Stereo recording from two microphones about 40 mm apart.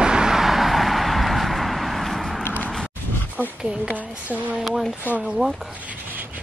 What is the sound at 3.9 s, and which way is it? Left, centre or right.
Speech, right.